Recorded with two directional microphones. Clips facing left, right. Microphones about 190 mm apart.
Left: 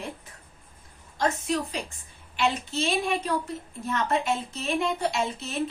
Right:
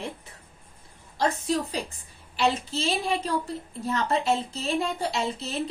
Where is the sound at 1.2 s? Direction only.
35° right (ahead or behind).